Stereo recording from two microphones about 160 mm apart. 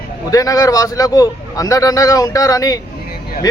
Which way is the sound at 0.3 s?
20° left (ahead or behind).